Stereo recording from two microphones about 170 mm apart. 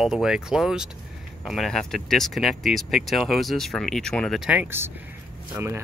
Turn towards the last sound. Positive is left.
turn(degrees=-15)  # may be behind; listen again after turning